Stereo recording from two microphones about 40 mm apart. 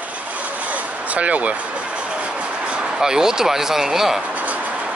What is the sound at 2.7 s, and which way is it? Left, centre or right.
Speech, right.